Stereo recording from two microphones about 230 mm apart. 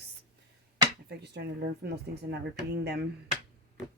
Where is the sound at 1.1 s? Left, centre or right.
Right.